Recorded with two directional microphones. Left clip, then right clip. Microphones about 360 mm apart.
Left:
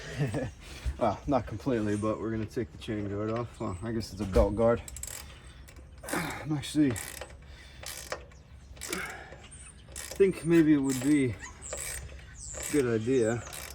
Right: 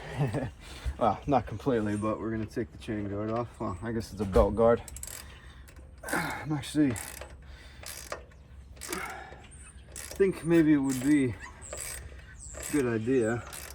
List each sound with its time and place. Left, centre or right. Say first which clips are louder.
0.0 s speech: right 1 dB; centre
1.7 s speech: even; centre
4.2 s speech: right 2 dB; centre
6.0 s a sound: right 2 dB; centre
6.7 s speech: even; centre
7.8 s mechanisms: left 1 dB; centre
8.8 s a sound: even; centre
9.9 s dog: left 2 dB; centre
12.5 s mechanisms: left 1 dB; centre